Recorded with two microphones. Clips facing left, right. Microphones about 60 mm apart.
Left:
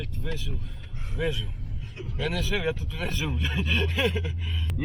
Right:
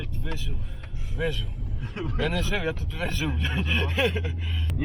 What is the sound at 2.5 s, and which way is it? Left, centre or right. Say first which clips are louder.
Speech: even; centre.